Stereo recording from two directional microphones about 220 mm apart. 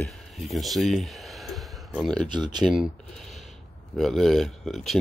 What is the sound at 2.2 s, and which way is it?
Speech, 20° right (ahead or behind).